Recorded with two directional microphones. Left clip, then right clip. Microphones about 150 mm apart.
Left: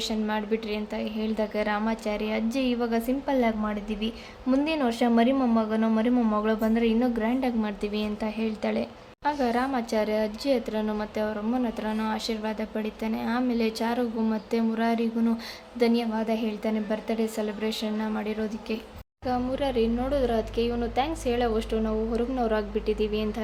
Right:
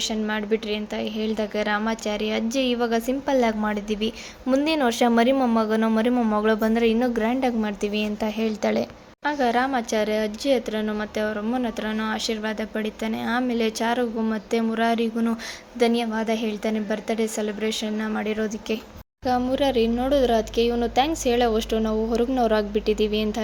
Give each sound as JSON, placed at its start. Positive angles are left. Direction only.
{"t": 0.0, "sound": "a woman's voice", "side_deg": -20}